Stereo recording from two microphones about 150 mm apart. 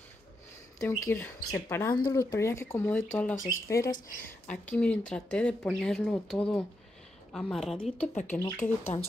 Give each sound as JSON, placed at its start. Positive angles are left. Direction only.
{"t": 0.7, "sound": "speech", "side_deg": 15}
{"t": 4.3, "sound": "a woman's voice", "side_deg": 10}
{"t": 8.3, "sound": "speech", "side_deg": 15}
{"t": 8.9, "sound": "speech", "side_deg": 35}